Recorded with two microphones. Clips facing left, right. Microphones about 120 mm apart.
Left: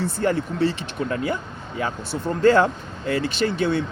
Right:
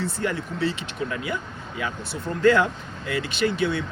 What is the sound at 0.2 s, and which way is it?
Speech, 40° left (ahead or behind).